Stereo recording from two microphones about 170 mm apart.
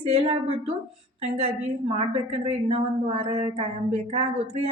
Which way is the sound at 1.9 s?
35° right (ahead or behind).